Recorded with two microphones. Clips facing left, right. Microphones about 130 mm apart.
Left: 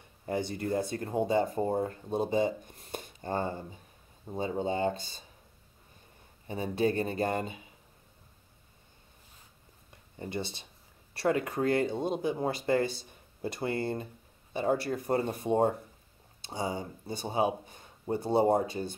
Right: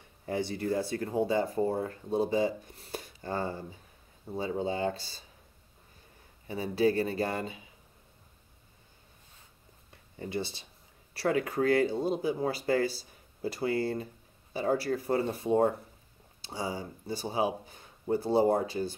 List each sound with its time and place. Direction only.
0.3 s speech: 50° left (ahead or behind)
0.6 s speech: 20° left (ahead or behind)
6.4 s speech: 25° left (ahead or behind)
11.1 s speech: 25° left (ahead or behind)